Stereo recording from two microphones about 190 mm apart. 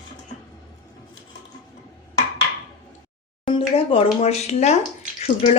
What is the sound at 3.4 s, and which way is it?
Speech, 30° left (ahead or behind).